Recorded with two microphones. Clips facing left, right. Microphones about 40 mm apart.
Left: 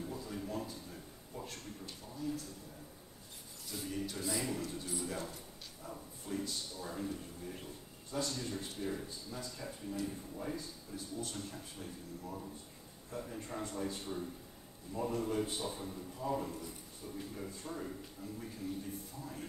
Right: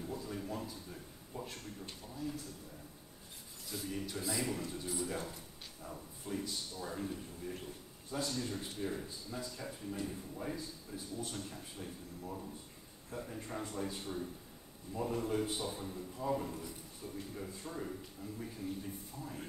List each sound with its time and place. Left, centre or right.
0.0 s a sound: centre
2.1 s speech: centre
3.7 s a man's voice: centre
10.9 s a man's voice: right
11.5 s a man's voice: centre